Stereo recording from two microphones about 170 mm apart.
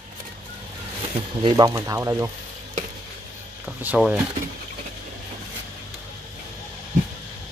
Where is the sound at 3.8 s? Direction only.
5° right (ahead or behind).